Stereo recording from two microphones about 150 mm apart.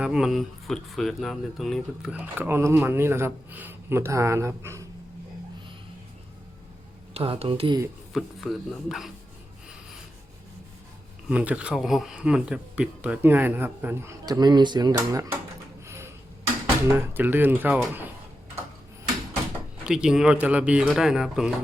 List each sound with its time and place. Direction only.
0.0 s speech: 5° right (ahead or behind)
7.1 s speech: 40° right (ahead or behind)
8.1 s speech: centre (ahead or behind)
11.3 s speech: 10° right (ahead or behind)
15.9 s a sound: 15° right (ahead or behind)
16.9 s speech: 15° right (ahead or behind)
19.8 s speech: 5° right (ahead or behind)